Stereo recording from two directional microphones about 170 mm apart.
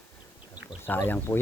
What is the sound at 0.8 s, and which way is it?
Speech, 10° left (ahead or behind).